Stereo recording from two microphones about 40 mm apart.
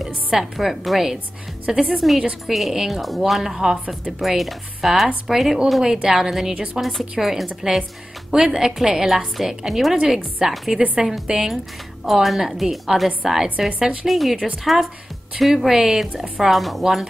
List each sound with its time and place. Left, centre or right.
0.0 s a woman's voice: centre
6.5 s a woman's voice: right
6.8 s speech: centre
8.3 s a woman's voice: centre